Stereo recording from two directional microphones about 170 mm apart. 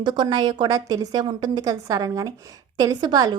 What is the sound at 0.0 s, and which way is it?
A woman's voice, 25° right (ahead or behind).